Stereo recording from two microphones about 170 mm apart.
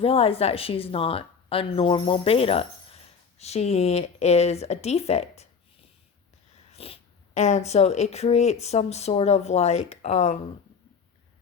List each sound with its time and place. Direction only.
0.0 s a woman's voice: 35° left (ahead or behind)
6.7 s a woman's voice: 35° left (ahead or behind)